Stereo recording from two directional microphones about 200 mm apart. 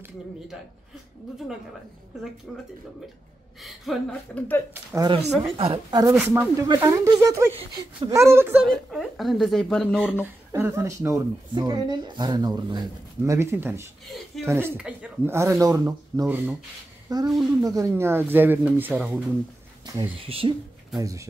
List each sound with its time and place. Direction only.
2.5 s speech: centre (ahead or behind)
4.9 s speech: 20° right (ahead or behind)
6.1 s speech: 10° right (ahead or behind)
7.5 s speech: 30° right (ahead or behind)
8.1 s speech: 15° right (ahead or behind)
8.6 s speech: centre (ahead or behind)
10.2 s speech: 10° right (ahead or behind)
14.0 s speech: centre (ahead or behind)
14.4 s speech: 10° right (ahead or behind)
20.2 s speech: 25° right (ahead or behind)
21.0 s speech: 15° right (ahead or behind)